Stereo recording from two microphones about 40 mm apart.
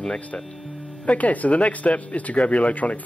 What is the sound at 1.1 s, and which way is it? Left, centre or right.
Speech, left.